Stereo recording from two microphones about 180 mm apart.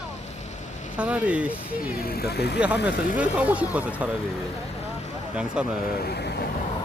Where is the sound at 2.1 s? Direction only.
60° left (ahead or behind).